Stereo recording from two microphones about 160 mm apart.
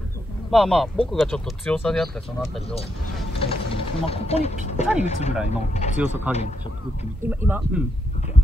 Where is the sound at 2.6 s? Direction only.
40° left (ahead or behind).